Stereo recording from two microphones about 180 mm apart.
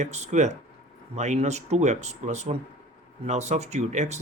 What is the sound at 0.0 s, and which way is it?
Speech, 40° right (ahead or behind).